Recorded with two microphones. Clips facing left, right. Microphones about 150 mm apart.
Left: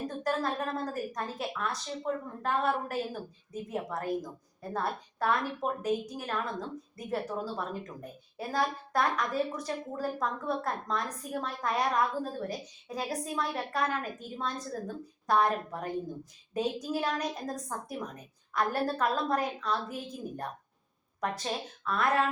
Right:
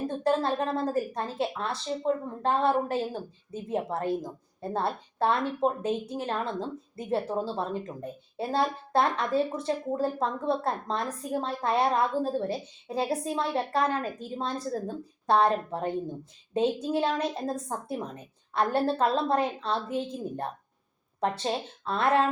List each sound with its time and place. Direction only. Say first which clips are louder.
0.1 s a woman's voice: right 7 dB; 30° right (ahead or behind)